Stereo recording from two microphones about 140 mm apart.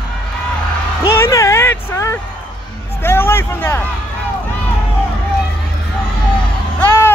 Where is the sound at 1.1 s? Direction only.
20° left (ahead or behind).